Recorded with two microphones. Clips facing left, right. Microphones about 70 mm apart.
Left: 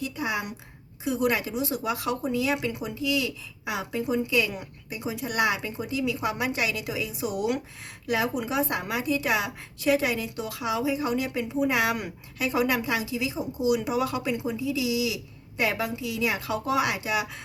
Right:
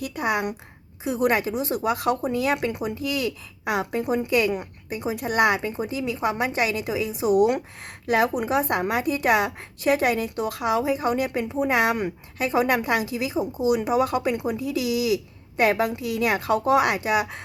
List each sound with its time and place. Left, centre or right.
0.0 s speech: right
1.0 s speech: right